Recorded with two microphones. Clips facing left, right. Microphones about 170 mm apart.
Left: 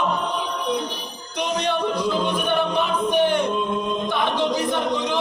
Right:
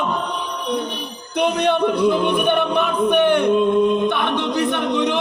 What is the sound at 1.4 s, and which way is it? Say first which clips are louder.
Music: right 6 dB; 60° right (ahead or behind).